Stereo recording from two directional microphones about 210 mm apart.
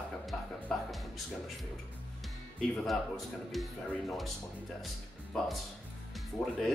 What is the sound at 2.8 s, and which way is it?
Speech, centre (ahead or behind).